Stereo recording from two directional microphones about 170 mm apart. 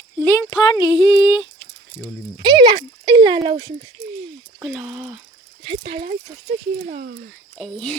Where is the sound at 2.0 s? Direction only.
25° right (ahead or behind).